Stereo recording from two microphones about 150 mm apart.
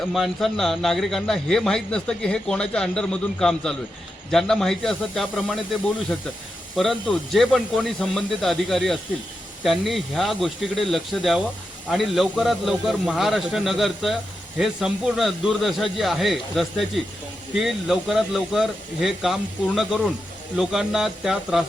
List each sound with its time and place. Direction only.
0.0 s a man's voice: centre (ahead or behind)
6.7 s a man's voice: centre (ahead or behind)